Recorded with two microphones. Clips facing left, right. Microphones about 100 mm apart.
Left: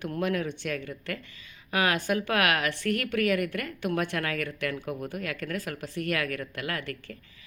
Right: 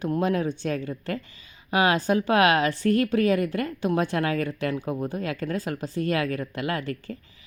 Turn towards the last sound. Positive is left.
turn(degrees=-30)  # may be behind; listen again after turning